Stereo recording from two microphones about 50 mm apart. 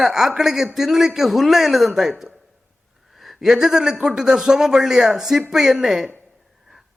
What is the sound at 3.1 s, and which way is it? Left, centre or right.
A man's voice, centre.